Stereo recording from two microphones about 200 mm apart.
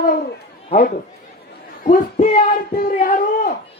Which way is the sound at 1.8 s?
40° left (ahead or behind).